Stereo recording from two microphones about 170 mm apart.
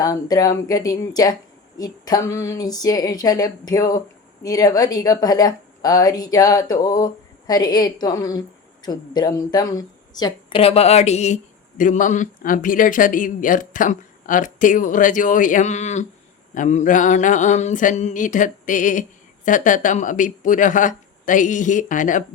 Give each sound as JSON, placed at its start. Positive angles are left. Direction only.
{"t": 0.0, "sound": "a woman's voice", "side_deg": 20}
{"t": 10.6, "sound": "speech", "side_deg": 35}